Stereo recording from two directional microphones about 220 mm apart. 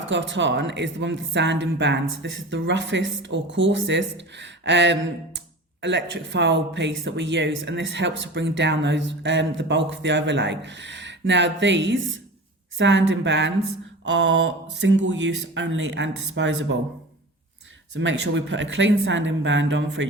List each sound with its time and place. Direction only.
0.0 s speech: 60° right (ahead or behind)
14.0 s mantra: 55° right (ahead or behind)
15.5 s speech: 55° right (ahead or behind)
17.9 s speech: 60° right (ahead or behind)